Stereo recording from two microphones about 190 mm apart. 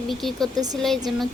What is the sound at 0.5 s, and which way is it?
Speech, 20° right (ahead or behind).